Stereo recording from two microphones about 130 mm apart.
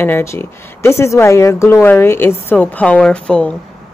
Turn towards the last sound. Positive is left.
turn(degrees=10)  # may be behind; listen again after turning